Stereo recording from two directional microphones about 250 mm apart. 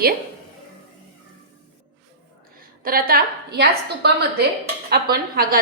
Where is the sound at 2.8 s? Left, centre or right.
Right.